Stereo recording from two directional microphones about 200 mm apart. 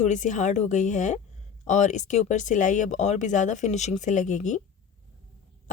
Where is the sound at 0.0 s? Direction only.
35° left (ahead or behind).